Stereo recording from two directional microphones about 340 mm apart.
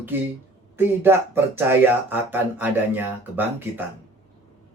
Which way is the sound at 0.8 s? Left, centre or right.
Centre.